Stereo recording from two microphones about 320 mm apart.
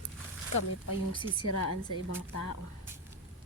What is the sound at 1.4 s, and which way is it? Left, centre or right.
Speech, left.